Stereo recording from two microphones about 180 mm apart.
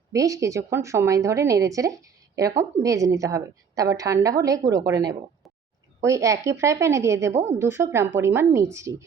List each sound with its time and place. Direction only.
0.1 s a woman's voice: 20° right (ahead or behind)